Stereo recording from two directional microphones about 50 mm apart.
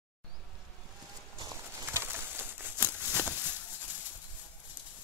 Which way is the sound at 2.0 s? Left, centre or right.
Right.